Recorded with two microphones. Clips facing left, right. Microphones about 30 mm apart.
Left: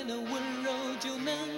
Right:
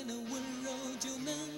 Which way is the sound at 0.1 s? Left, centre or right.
Left.